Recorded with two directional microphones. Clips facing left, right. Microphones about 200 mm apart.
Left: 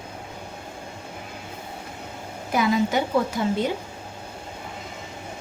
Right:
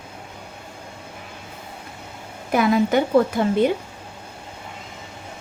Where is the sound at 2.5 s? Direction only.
55° right (ahead or behind).